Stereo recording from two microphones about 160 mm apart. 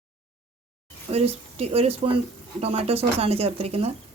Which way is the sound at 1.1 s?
40° right (ahead or behind).